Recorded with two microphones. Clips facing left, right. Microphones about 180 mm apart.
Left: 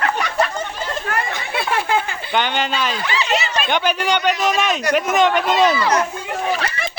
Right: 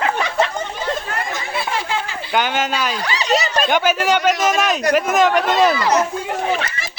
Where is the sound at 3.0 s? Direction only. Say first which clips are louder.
Right 2 dB; 40° right (ahead or behind).